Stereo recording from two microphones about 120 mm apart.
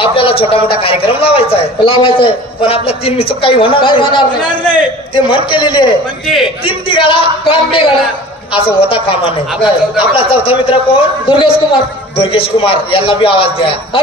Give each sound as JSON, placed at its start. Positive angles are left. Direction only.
{"t": 0.0, "sound": "a man's voice", "side_deg": 50}